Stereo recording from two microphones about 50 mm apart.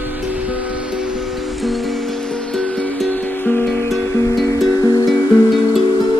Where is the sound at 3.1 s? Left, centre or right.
Left.